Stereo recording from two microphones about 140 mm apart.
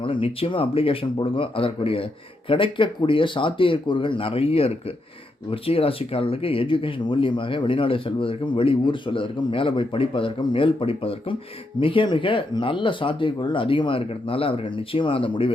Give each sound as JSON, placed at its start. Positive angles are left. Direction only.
{"t": 0.0, "sound": "speech", "side_deg": 40}